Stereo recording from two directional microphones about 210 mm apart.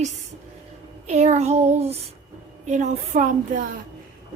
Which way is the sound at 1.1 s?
30° right (ahead or behind).